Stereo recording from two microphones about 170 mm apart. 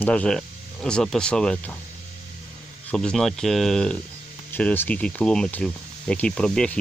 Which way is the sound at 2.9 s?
5° left (ahead or behind).